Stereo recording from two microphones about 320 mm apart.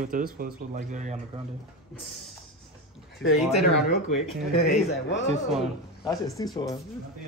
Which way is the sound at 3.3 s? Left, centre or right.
Centre.